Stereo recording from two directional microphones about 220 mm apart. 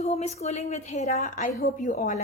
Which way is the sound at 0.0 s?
30° left (ahead or behind).